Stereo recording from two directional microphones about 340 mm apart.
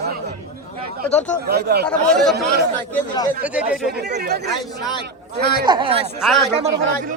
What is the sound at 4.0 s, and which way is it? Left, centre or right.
Speech, right.